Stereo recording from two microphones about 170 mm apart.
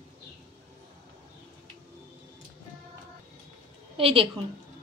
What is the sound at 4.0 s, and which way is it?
Speech, 35° right (ahead or behind).